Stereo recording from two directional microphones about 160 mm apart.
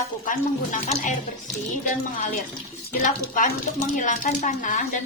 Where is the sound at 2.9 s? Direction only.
55° left (ahead or behind).